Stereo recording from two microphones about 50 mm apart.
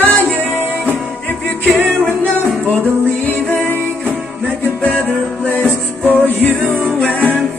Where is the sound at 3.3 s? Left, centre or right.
Left.